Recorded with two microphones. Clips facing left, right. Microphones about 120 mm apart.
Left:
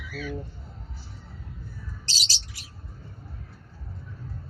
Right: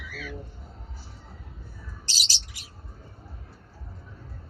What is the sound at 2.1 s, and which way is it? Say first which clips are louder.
Bird: right 2 dB; 15° right (ahead or behind).